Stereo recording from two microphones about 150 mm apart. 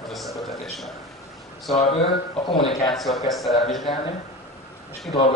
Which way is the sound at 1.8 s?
40° left (ahead or behind).